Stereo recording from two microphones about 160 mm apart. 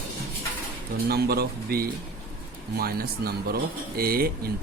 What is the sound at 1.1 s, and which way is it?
Speech, 80° right.